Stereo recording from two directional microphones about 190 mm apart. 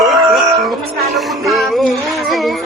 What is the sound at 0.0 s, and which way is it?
Music, centre (ahead or behind).